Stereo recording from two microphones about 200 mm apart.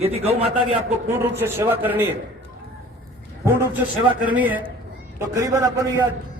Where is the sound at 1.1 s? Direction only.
10° right (ahead or behind).